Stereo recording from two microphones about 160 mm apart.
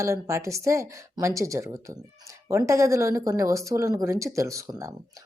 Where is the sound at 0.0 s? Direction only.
20° right (ahead or behind).